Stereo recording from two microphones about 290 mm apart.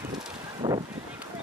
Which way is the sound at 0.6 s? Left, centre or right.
Centre.